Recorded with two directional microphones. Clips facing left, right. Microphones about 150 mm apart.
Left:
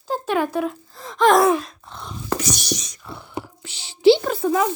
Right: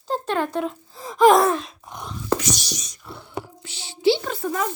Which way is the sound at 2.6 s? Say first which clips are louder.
Left 7 dB; 75° left (ahead or behind).